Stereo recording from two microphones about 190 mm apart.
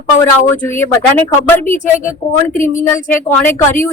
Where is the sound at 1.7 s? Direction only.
40° left (ahead or behind).